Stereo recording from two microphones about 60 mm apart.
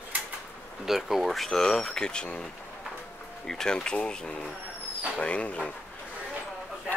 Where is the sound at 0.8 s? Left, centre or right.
Centre; by 5.6 s left.